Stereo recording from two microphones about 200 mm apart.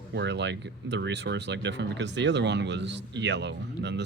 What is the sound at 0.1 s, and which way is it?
Speech, 60° right (ahead or behind).